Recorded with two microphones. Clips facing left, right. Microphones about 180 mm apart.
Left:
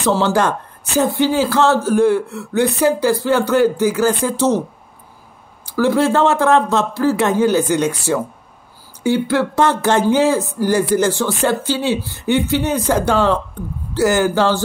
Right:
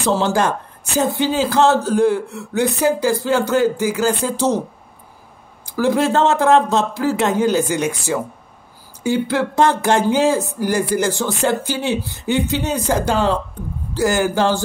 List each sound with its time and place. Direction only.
0.0 s a man's voice: 15° right (ahead or behind)
5.8 s a man's voice: 15° right (ahead or behind)
9.0 s a man's voice: 15° right (ahead or behind)